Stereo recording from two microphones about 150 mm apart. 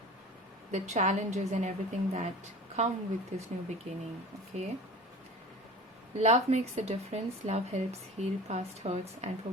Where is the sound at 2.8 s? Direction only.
45° right (ahead or behind).